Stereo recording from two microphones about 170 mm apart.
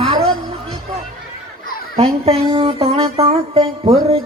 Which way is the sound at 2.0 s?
35° right (ahead or behind).